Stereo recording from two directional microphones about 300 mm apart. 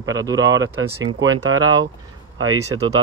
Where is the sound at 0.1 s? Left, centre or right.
Centre.